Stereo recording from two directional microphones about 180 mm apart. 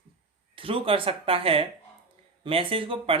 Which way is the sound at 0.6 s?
30° right (ahead or behind).